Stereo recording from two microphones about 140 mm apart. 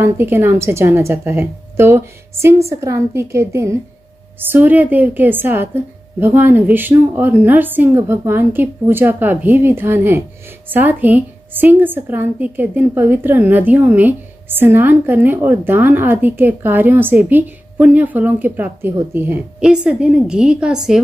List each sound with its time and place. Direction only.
0.0 s a woman's voice: 15° right (ahead or behind)
19.6 s a woman's voice: 5° right (ahead or behind)